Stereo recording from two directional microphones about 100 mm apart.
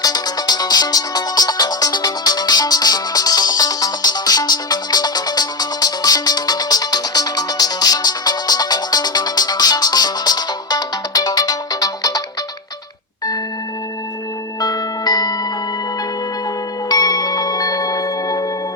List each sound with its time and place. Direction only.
0.0 s music: 40° left (ahead or behind)
14.6 s music: 40° left (ahead or behind)
16.9 s marimba: 40° left (ahead or behind)